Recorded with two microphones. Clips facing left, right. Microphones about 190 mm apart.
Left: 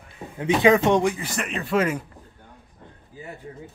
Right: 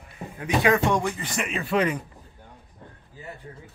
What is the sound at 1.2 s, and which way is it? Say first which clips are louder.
Speech: even; centre (ahead or behind).